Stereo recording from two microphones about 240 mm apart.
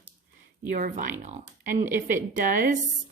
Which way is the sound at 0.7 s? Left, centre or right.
Right.